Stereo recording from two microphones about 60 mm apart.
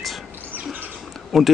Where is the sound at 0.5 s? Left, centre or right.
Right.